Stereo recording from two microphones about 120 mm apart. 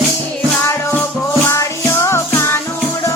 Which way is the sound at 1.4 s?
25° left (ahead or behind).